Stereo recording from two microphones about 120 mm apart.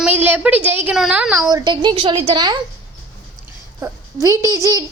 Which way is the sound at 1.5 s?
40° right (ahead or behind).